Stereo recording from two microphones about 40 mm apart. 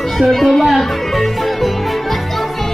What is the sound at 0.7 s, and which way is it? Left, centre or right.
Music, centre.